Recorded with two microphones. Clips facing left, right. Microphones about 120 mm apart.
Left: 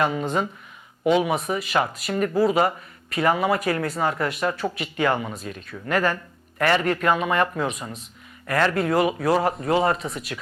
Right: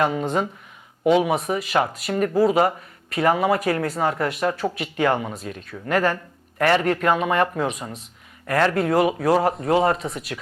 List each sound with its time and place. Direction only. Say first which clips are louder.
0.0 s speech: right 1 dB; 50° right (ahead or behind)
9.6 s speech: right 2 dB; 35° right (ahead or behind)